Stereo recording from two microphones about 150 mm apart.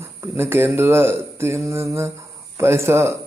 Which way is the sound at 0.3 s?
15° right (ahead or behind).